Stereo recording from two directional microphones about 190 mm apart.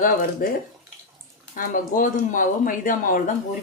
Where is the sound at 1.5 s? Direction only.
45° left (ahead or behind).